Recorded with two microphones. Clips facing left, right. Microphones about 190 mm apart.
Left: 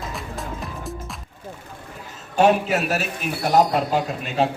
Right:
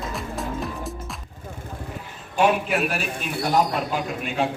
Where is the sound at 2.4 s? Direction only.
40° left (ahead or behind).